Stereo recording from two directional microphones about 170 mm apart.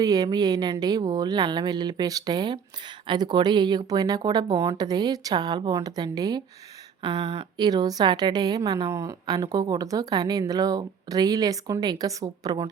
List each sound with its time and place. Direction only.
0.0 s a woman's voice: 20° right (ahead or behind)